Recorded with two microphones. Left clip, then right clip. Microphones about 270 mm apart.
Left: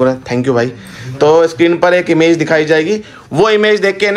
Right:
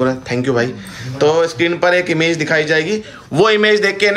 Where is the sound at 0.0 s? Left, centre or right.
Centre.